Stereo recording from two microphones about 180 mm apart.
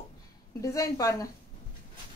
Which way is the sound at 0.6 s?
20° left (ahead or behind).